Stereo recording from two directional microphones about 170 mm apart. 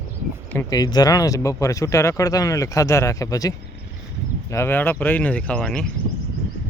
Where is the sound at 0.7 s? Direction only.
25° left (ahead or behind); by 5.9 s 5° left (ahead or behind).